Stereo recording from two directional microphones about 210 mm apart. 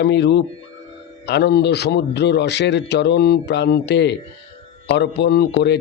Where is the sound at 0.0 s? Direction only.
55° left (ahead or behind).